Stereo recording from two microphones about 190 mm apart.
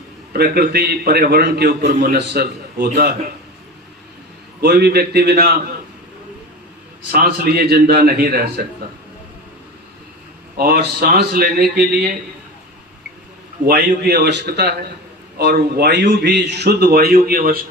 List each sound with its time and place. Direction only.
0.3 s a man's voice: 55° right (ahead or behind)
4.6 s a man's voice: 55° right (ahead or behind)
7.1 s a man's voice: 55° right (ahead or behind)
10.6 s a man's voice: 50° right (ahead or behind)
13.7 s a man's voice: 60° right (ahead or behind)